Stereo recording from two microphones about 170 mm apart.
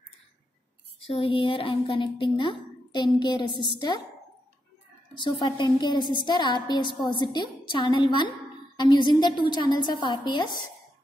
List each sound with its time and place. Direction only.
1.0 s a woman's voice: 35° left (ahead or behind)
5.1 s a woman's voice: 25° left (ahead or behind)